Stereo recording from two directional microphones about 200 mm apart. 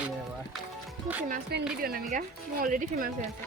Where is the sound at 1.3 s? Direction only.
45° right (ahead or behind).